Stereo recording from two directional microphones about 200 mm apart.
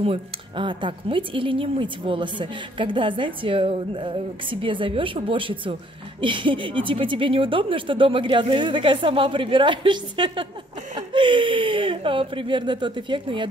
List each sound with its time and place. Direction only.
0.0 s speech: 25° right (ahead or behind)